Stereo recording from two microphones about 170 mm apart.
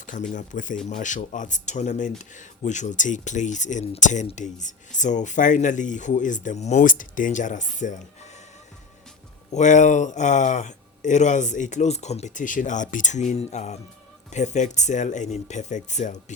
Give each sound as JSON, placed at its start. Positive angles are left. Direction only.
{"t": 0.0, "sound": "speech", "side_deg": 50}
{"t": 9.5, "sound": "speech", "side_deg": 45}